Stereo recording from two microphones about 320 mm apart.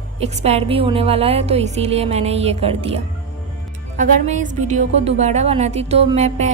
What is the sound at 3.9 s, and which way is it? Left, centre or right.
A woman's voice, right.